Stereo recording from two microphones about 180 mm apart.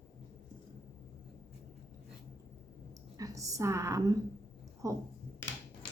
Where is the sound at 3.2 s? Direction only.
20° right (ahead or behind).